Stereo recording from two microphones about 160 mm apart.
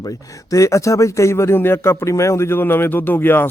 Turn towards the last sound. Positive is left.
turn(degrees=15)  # may be behind; listen again after turning